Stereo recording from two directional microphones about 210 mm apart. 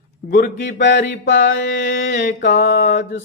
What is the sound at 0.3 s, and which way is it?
Mantra, 40° left (ahead or behind).